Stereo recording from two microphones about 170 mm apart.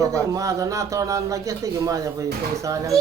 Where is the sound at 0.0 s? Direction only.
20° right (ahead or behind).